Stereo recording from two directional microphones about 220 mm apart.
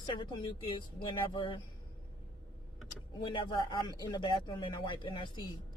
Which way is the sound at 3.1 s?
20° left (ahead or behind).